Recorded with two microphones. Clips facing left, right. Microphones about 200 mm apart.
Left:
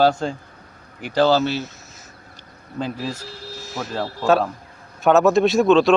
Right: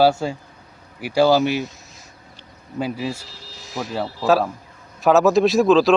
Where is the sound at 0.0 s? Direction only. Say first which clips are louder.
Right 1 dB; 10° right (ahead or behind).